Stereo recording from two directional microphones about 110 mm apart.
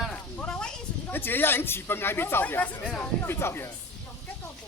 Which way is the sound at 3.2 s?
20° left (ahead or behind).